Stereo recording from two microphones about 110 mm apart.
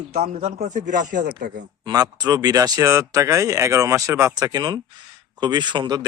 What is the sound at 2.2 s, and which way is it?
Speech, 35° right (ahead or behind).